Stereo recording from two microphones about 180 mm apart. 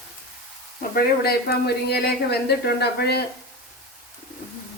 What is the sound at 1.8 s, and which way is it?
A woman's voice, 65° left (ahead or behind).